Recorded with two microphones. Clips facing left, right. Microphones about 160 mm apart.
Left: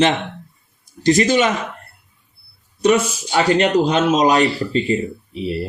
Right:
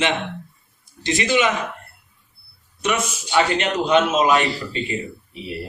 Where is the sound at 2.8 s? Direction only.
35° left (ahead or behind).